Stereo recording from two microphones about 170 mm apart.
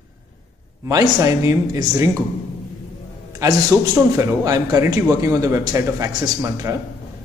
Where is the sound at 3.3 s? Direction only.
20° right (ahead or behind).